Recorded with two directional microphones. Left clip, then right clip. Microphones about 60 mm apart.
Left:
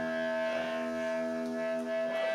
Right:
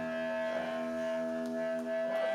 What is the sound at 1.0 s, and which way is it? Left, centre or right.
Music, centre.